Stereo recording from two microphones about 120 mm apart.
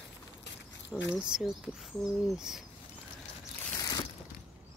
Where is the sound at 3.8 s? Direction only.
35° left (ahead or behind).